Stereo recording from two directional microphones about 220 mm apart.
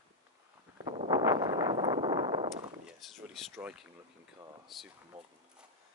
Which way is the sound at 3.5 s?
5° right (ahead or behind).